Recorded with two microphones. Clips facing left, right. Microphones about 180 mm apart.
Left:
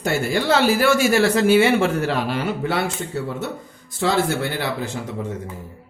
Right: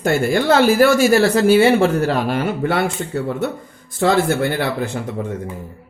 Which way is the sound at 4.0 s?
55° right (ahead or behind).